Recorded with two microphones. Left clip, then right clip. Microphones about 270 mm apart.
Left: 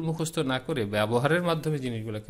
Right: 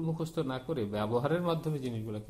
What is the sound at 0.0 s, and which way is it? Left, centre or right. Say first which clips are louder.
Speech: left 5 dB; left.